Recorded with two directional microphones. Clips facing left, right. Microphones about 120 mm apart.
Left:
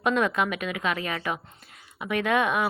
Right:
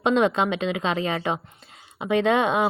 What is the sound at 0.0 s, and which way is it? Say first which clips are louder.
Speech: right 4 dB; 25° right (ahead or behind).